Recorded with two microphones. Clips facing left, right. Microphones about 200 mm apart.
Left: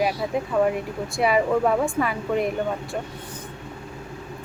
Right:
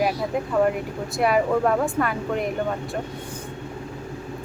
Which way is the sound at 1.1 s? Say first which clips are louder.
Even; centre (ahead or behind).